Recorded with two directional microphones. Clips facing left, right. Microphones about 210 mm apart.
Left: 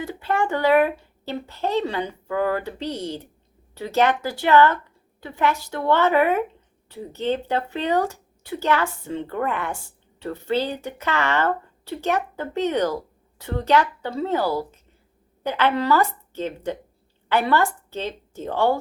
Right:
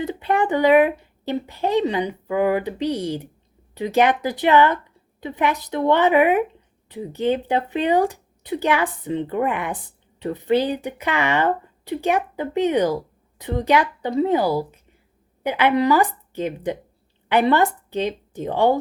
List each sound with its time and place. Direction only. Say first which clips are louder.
0.0 s a woman's voice: right 3 dB; 20° right (ahead or behind)